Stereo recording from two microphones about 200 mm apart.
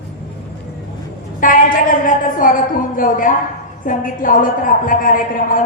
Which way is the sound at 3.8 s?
40° left (ahead or behind).